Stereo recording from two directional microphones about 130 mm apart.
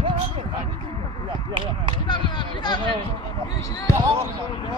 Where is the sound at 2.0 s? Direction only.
35° left (ahead or behind).